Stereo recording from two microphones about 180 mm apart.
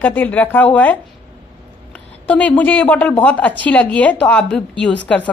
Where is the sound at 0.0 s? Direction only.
10° left (ahead or behind).